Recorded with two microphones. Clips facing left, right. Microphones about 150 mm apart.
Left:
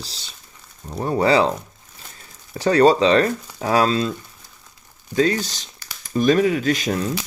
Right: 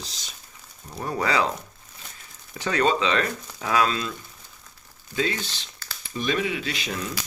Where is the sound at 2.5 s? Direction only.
35° left (ahead or behind).